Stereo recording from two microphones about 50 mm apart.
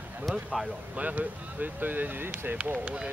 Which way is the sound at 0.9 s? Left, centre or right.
Right.